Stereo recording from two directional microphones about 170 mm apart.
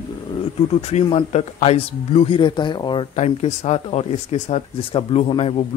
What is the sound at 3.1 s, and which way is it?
Speech, 40° left (ahead or behind).